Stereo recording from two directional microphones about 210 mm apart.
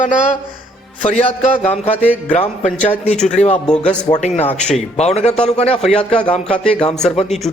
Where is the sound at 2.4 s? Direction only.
35° left (ahead or behind).